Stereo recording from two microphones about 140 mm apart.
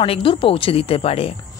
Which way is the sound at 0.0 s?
40° left (ahead or behind).